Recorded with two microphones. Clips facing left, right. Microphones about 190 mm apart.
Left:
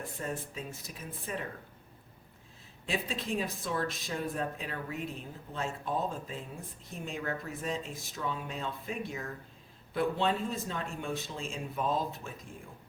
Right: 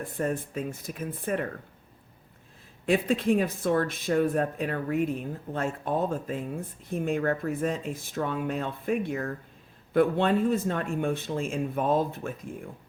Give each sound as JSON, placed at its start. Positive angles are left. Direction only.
{"t": 0.0, "sound": "speech", "side_deg": -55}
{"t": 2.8, "sound": "speech", "side_deg": -55}